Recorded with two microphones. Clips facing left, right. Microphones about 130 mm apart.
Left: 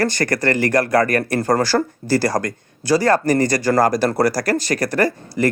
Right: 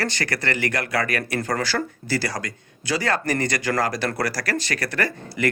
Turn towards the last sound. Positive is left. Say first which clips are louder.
# left 6 dB
turn(degrees=40)  # may be behind; listen again after turning